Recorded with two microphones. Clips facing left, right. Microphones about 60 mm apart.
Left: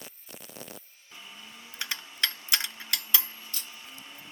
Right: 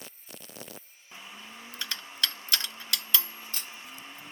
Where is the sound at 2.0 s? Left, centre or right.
Right.